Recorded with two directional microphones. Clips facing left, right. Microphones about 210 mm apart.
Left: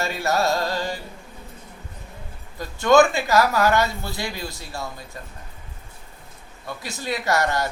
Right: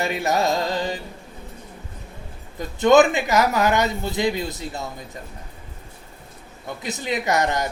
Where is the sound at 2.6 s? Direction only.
20° right (ahead or behind).